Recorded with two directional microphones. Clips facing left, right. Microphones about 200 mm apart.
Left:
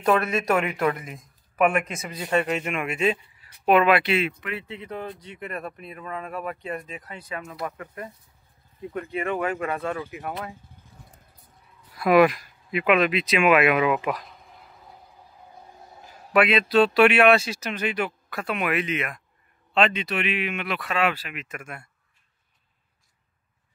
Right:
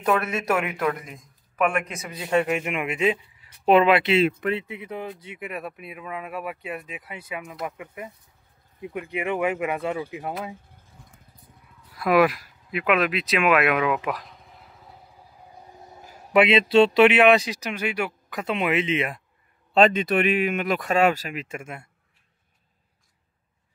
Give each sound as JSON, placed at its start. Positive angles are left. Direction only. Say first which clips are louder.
{"t": 0.0, "sound": "a man's voice", "louder": "left 2 dB", "side_deg": -5}
{"t": 12.0, "sound": "speech", "louder": "left 2 dB", "side_deg": 0}
{"t": 15.5, "sound": "a man's voice", "louder": "right 2 dB", "side_deg": -15}
{"t": 19.7, "sound": "speech", "louder": "right 5 dB", "side_deg": -45}